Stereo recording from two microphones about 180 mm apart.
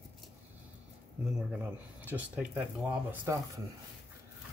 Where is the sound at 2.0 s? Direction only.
10° right (ahead or behind).